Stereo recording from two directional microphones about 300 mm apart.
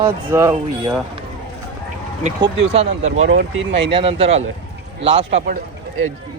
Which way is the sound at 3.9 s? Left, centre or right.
Centre.